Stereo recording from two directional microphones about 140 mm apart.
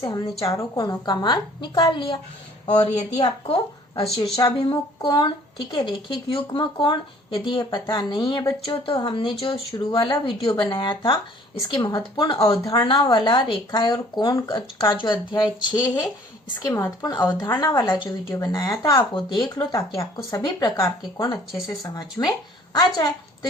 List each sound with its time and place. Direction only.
0.0 s a woman's voice: 25° left (ahead or behind)
3.2 s a woman's voice: 40° left (ahead or behind)